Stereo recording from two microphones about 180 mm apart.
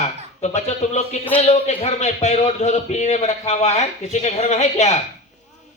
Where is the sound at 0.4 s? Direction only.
40° left (ahead or behind).